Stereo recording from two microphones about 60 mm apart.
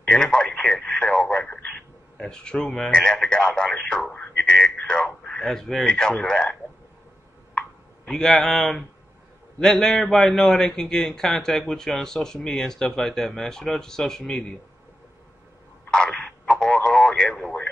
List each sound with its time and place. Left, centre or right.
0.0 s radio: centre
2.1 s a man's voice: centre
4.1 s radio: left
6.2 s a man's voice: centre
7.5 s a sound: centre
8.2 s a man's voice: centre
15.9 s radio: centre